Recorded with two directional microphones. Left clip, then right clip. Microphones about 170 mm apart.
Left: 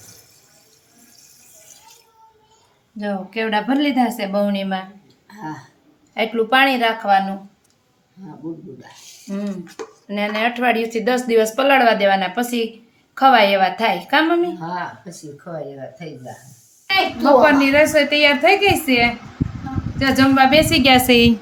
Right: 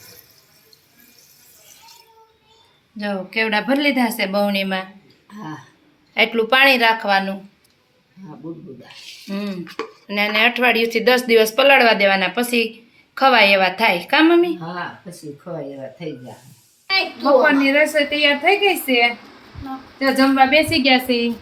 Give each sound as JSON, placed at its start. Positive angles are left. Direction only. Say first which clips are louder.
{"t": 3.0, "sound": "speech", "louder": "right 2 dB", "side_deg": -5}
{"t": 6.1, "sound": "speech", "louder": "right 1 dB", "side_deg": -10}
{"t": 9.3, "sound": "speech", "louder": "right 1 dB", "side_deg": -10}
{"t": 17.4, "sound": "a woman's voice", "louder": "left 2 dB", "side_deg": 15}
{"t": 20.7, "sound": "a woman's voice", "louder": "left 3 dB", "side_deg": 40}
{"t": 21.1, "sound": "a woman's voice", "louder": "left 7 dB", "side_deg": 65}